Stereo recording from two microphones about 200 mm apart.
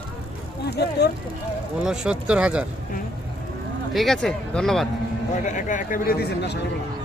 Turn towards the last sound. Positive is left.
turn(degrees=55)  # may be behind; listen again after turning